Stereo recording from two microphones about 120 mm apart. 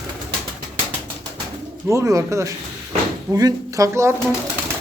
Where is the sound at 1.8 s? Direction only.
25° right (ahead or behind).